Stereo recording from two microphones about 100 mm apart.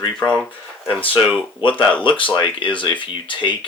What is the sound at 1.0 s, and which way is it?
Speech, 60° left (ahead or behind).